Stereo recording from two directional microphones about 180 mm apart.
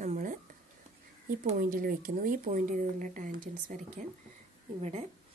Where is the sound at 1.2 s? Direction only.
55° right (ahead or behind).